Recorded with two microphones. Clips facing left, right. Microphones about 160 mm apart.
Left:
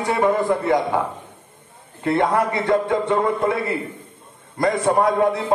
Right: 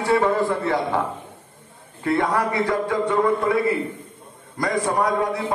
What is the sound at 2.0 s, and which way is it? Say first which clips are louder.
A man's voice: left 2 dB; 25° left (ahead or behind).